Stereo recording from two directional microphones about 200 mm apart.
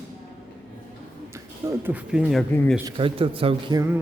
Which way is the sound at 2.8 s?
25° right (ahead or behind).